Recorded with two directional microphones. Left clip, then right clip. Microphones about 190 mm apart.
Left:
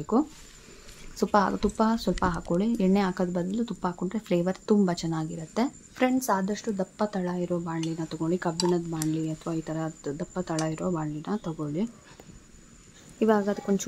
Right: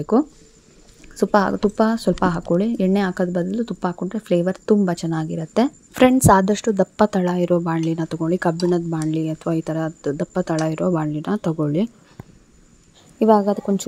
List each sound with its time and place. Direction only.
0.1 s speech: 30° right (ahead or behind)
13.2 s a woman's voice: 15° right (ahead or behind)